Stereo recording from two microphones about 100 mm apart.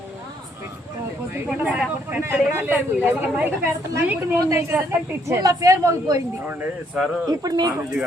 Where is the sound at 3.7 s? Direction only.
35° right (ahead or behind).